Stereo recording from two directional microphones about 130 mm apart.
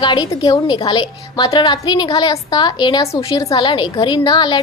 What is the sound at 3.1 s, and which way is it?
A woman's voice, 25° left (ahead or behind).